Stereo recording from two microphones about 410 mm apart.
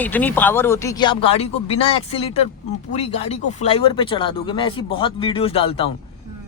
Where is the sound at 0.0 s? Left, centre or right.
Centre.